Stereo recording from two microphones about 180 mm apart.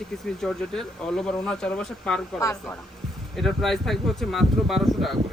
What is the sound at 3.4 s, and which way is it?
Speech, centre (ahead or behind).